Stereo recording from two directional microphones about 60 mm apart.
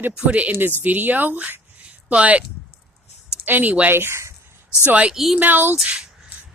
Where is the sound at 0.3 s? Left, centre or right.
Right.